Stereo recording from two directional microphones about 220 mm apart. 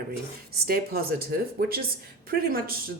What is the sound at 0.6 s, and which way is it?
Speech, 45° right (ahead or behind).